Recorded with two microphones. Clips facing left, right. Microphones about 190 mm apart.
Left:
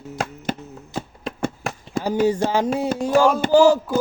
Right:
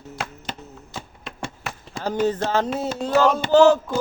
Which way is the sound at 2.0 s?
10° left (ahead or behind).